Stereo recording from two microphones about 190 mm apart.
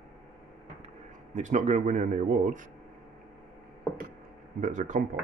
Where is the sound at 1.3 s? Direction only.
40° right (ahead or behind).